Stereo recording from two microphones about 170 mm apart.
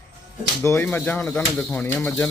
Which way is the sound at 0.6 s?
15° left (ahead or behind).